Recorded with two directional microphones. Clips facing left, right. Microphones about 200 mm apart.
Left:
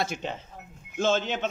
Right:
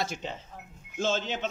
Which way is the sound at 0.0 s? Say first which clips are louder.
Left 3 dB; 60° left (ahead or behind).